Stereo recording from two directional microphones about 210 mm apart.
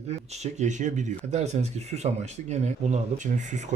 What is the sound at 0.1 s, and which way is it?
Speech, 35° right (ahead or behind).